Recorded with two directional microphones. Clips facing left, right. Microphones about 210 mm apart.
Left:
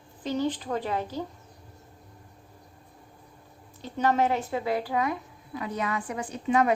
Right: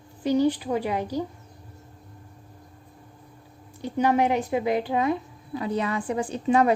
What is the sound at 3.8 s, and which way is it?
Speech, 15° right (ahead or behind).